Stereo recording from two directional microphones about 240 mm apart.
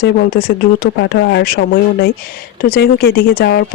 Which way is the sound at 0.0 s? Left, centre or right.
Left.